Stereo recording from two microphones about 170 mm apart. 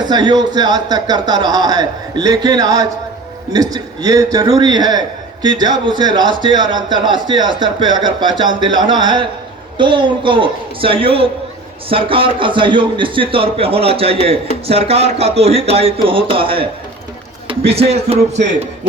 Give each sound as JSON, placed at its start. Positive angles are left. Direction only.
{"t": 0.0, "sound": "a man's voice", "side_deg": -25}